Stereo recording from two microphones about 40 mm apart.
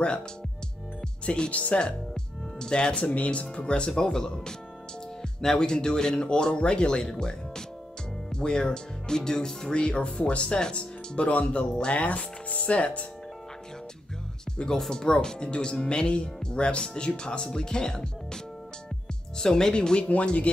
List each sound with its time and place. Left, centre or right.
1.2 s speech: left
1.5 s speech: left
2.6 s speech: left
3.9 s speech: centre
9.8 s speech: left
11.7 s speech: left
12.2 s speech: left
14.8 s speech: centre